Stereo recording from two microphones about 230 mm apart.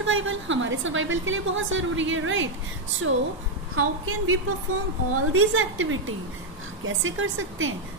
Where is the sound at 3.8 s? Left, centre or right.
Right.